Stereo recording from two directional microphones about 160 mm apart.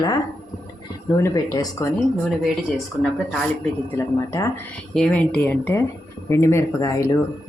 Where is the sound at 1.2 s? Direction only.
20° left (ahead or behind).